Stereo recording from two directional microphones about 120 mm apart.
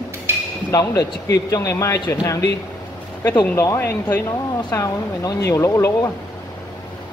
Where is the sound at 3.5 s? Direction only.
20° left (ahead or behind).